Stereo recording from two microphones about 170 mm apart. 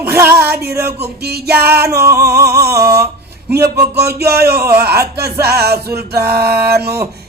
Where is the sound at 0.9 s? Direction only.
70° right (ahead or behind).